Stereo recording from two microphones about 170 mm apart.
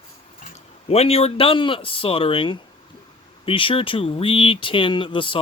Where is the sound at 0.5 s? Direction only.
40° left (ahead or behind).